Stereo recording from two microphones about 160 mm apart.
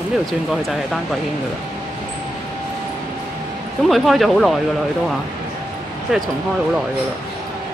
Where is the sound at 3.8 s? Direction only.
Centre (ahead or behind).